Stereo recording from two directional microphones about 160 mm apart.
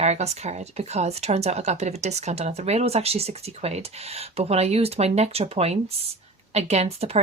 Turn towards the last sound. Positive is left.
turn(degrees=-40)  # may be behind; listen again after turning